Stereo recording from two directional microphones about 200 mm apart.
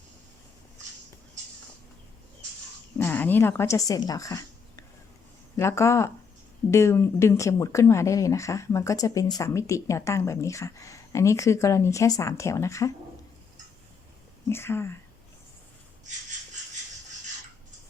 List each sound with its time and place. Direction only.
3.0 s a woman's voice: 10° left (ahead or behind)
14.5 s speech: 10° left (ahead or behind)